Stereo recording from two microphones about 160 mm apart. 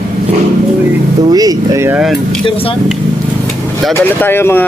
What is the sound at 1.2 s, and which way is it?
Speech, 25° right (ahead or behind).